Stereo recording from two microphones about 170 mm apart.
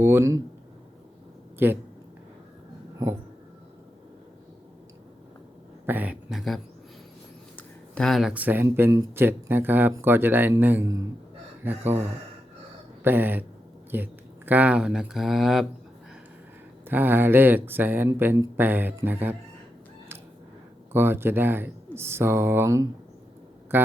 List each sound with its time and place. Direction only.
0.0 s speech: 15° right (ahead or behind)
1.5 s speech: 10° right (ahead or behind)
5.8 s speech: 10° right (ahead or behind)
16.9 s speech: 10° right (ahead or behind)
20.9 s speech: 15° right (ahead or behind)